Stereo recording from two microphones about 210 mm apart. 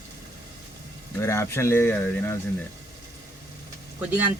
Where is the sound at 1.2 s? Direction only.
10° left (ahead or behind).